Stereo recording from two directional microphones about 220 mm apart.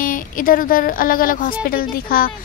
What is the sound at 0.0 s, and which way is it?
A woman's voice, 40° left (ahead or behind).